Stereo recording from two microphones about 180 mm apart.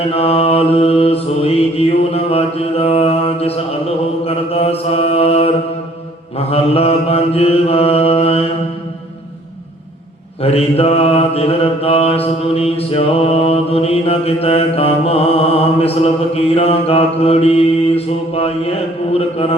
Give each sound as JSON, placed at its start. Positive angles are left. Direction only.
{"t": 0.0, "sound": "mantra", "side_deg": 35}
{"t": 10.4, "sound": "mantra", "side_deg": 35}